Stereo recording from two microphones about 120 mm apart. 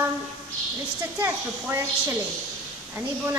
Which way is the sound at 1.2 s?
20° right (ahead or behind).